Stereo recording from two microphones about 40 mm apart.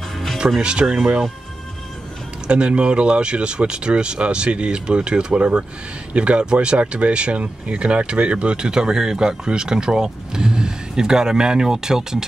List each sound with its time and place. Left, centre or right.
0.6 s speech: right
2.4 s speech: right